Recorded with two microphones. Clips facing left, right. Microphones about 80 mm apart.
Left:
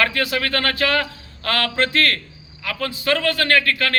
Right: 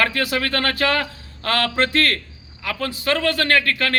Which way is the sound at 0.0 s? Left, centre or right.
Right.